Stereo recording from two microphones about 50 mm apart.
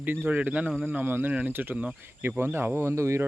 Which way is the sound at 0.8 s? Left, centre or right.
Right.